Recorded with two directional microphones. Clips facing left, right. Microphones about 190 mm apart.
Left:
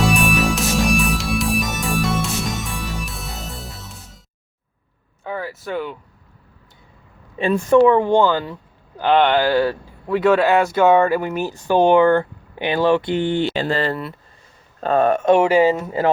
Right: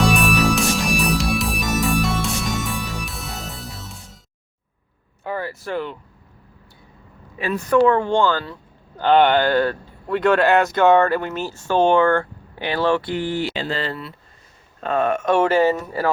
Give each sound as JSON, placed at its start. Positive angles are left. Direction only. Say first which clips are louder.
{"t": 0.0, "sound": "music", "louder": "even", "side_deg": 0}
{"t": 5.2, "sound": "speech", "louder": "even", "side_deg": 0}
{"t": 7.3, "sound": "speech", "louder": "left 4 dB", "side_deg": 25}
{"t": 9.0, "sound": "speech", "louder": "even", "side_deg": 5}
{"t": 13.5, "sound": "speech", "louder": "left 5 dB", "side_deg": 50}
{"t": 14.8, "sound": "speech", "louder": "left 4 dB", "side_deg": 35}
{"t": 15.3, "sound": "speech", "louder": "left 2 dB", "side_deg": 15}